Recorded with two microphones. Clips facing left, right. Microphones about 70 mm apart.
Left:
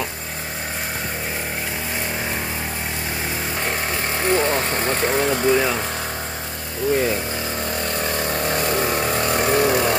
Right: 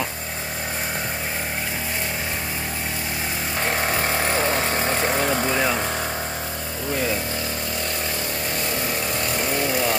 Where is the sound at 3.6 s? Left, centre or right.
Centre.